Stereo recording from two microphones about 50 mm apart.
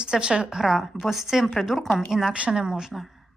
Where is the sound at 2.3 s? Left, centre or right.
Right.